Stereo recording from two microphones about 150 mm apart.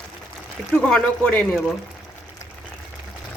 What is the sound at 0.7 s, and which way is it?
A woman's voice, 5° left (ahead or behind).